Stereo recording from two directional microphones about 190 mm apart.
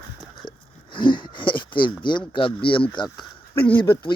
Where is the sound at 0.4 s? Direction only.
25° left (ahead or behind).